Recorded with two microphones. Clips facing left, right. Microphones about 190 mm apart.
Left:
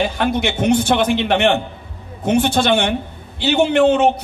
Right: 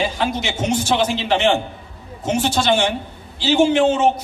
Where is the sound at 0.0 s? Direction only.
60° left (ahead or behind).